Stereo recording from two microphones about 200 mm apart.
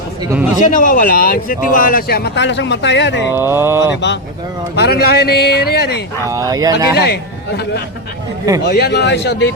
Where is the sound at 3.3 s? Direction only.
10° right (ahead or behind).